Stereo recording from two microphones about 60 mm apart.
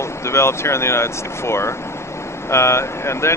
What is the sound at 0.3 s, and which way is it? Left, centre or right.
Speech, left.